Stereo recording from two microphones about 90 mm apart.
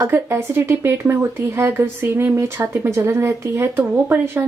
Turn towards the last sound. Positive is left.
turn(degrees=-20)  # may be behind; listen again after turning